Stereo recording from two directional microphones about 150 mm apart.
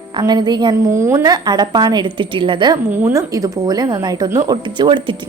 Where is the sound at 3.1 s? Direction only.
20° right (ahead or behind).